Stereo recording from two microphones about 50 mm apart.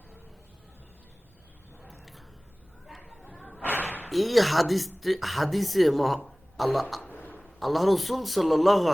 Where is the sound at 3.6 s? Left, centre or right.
Left.